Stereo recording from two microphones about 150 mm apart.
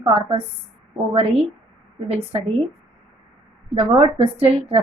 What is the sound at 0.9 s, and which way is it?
Speech, centre (ahead or behind).